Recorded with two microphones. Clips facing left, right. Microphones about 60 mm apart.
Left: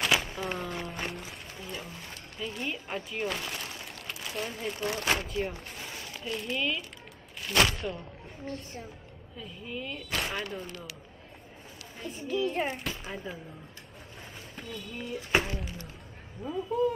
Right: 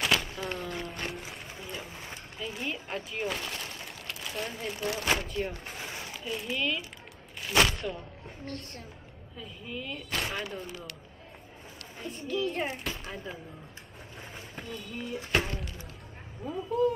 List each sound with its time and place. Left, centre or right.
0.1 s a sound: centre
2.0 s speech: centre
5.8 s a sound: centre
6.3 s speech: centre
12.0 s speech: centre
14.5 s speech: centre